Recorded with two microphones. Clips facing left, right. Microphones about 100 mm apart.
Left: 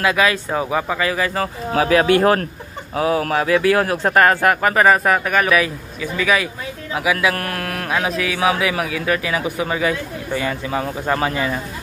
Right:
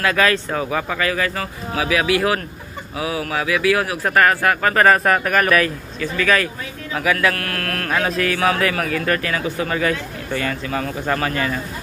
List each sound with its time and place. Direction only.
0.0 s a man's voice: 15° left (ahead or behind)
1.4 s speech: 35° left (ahead or behind)
4.7 s a man's voice: 5° left (ahead or behind)